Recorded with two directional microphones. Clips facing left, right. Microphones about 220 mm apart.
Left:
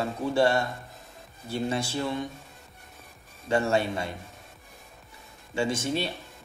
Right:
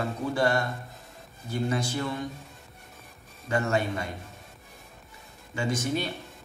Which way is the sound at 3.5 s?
30° left (ahead or behind).